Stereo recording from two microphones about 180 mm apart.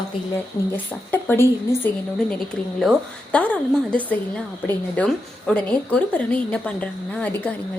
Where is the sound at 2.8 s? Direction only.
5° left (ahead or behind).